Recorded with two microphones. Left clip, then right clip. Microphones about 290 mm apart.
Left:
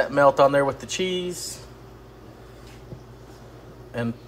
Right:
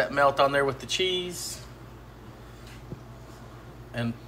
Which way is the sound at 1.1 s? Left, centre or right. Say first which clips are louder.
Left 1 dB; left.